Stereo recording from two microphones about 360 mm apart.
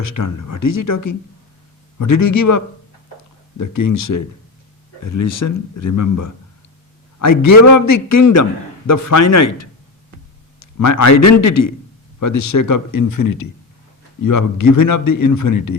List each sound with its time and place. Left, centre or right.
0.1 s speech: left
2.0 s speech: left
3.6 s speech: left
10.6 s a man's voice: left